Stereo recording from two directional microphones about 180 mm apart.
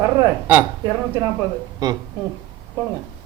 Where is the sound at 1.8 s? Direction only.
20° right (ahead or behind).